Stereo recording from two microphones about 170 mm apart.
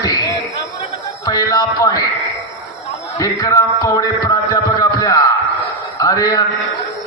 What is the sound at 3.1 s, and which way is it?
A man's voice, 20° left (ahead or behind).